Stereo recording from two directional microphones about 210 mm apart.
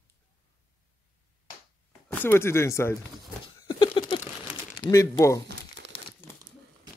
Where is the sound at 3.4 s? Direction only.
25° left (ahead or behind).